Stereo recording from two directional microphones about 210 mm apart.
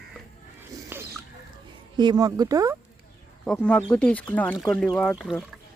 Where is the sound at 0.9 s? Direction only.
10° right (ahead or behind).